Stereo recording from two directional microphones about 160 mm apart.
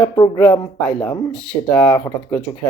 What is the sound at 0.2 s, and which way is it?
Speech, 15° left (ahead or behind).